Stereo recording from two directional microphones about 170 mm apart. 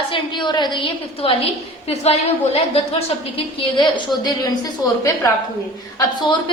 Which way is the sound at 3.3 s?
25° left (ahead or behind).